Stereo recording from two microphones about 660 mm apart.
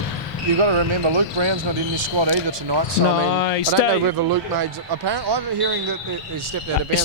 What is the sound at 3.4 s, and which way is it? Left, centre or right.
Speech, left.